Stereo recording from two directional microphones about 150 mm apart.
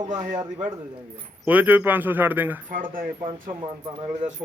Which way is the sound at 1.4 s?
10° right (ahead or behind).